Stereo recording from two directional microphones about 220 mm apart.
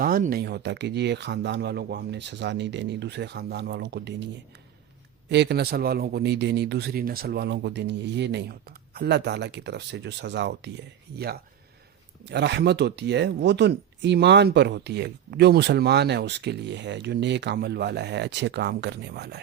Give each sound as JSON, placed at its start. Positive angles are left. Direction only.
{"t": 0.0, "sound": "speech", "side_deg": -40}
{"t": 5.3, "sound": "speech", "side_deg": -50}
{"t": 12.2, "sound": "speech", "side_deg": -50}